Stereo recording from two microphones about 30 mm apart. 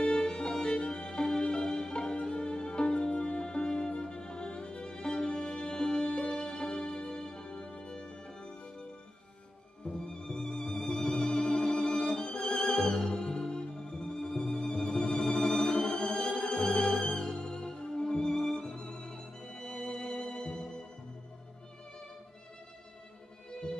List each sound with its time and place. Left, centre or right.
0.0 s violin: left
0.3 s violin: left
1.5 s music: left
6.0 s music: left
7.9 s music: left
9.8 s music: left
15.7 s music: left
16.3 s music: left
17.5 s music: left
23.5 s music: left